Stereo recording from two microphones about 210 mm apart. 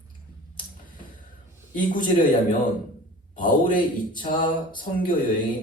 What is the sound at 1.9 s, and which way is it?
A man's voice, 40° left (ahead or behind).